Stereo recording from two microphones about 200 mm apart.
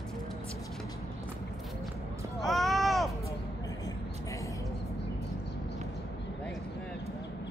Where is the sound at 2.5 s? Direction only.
Centre (ahead or behind).